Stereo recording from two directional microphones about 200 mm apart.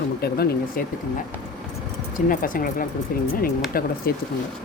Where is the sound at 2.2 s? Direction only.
45° left (ahead or behind).